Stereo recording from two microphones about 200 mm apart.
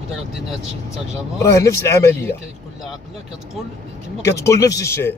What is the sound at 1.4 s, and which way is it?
Speech, 15° left (ahead or behind).